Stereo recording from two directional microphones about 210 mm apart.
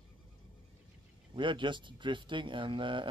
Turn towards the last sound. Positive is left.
turn(degrees=-25)  # may be behind; listen again after turning